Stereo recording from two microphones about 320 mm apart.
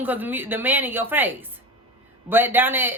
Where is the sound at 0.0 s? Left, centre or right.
Centre.